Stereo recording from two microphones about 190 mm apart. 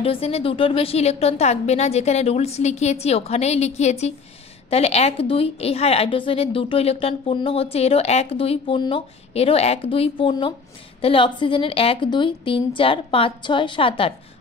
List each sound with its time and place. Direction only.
0.0 s a woman's voice: 30° left (ahead or behind)